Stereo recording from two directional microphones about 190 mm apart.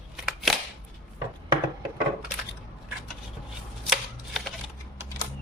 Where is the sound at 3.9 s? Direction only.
Centre (ahead or behind).